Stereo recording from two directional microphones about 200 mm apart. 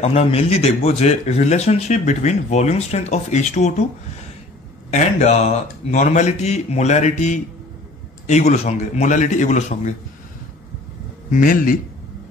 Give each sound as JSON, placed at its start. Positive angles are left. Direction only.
{"t": 0.0, "sound": "speech", "side_deg": 30}
{"t": 4.9, "sound": "speech", "side_deg": 35}
{"t": 11.2, "sound": "a man's voice", "side_deg": 40}